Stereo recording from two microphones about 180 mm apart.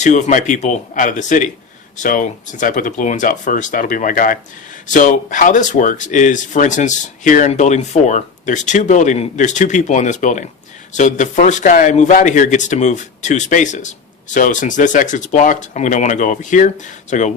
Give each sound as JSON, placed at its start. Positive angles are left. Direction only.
{"t": 0.0, "sound": "speech", "side_deg": 40}